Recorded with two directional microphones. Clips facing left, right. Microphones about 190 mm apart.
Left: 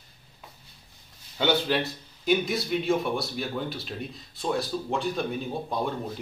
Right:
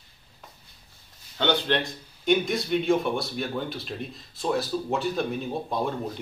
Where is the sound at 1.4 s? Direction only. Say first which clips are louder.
Even; 5° left (ahead or behind).